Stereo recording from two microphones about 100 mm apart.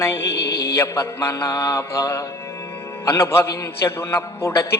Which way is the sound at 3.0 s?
25° left (ahead or behind).